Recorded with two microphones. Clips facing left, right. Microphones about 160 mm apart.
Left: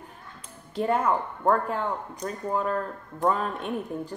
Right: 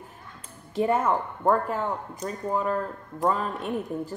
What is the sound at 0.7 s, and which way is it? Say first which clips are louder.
Speech: right 1 dB; 5° right (ahead or behind).